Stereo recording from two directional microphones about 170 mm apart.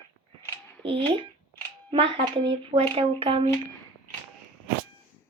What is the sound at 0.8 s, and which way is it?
Speech, 30° right (ahead or behind).